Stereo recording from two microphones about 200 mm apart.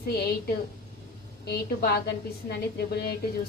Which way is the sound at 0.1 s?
50° left (ahead or behind).